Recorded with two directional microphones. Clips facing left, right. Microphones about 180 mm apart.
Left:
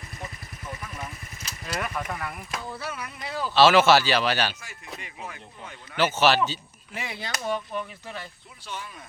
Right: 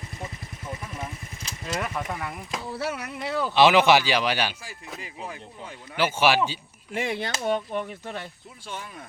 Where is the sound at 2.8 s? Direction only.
70° right (ahead or behind).